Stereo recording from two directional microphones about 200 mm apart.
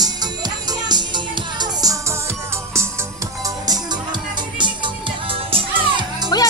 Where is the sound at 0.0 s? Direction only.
20° right (ahead or behind).